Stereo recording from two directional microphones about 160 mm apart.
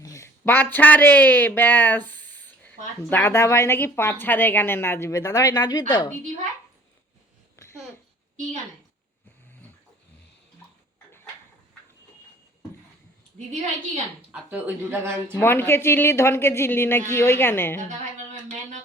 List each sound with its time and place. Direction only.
0.0 s speech: 20° left (ahead or behind)
7.5 s a sound: 15° left (ahead or behind)
13.5 s a woman's voice: 45° right (ahead or behind)
14.3 s speech: 10° right (ahead or behind)
15.4 s speech: 15° left (ahead or behind)